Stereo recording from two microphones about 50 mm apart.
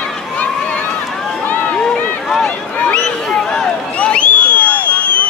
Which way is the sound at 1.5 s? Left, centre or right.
Left.